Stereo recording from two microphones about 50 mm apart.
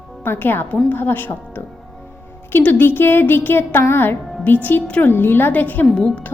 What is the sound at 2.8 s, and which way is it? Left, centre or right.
Music, left.